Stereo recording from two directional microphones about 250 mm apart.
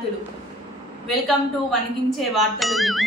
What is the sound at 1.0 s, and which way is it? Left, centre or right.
Speech, centre.